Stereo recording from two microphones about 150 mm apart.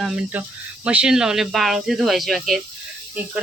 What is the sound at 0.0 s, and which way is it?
Speech, 5° right (ahead or behind).